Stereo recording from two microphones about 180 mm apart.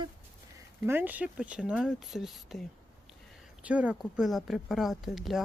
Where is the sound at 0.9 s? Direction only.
10° right (ahead or behind).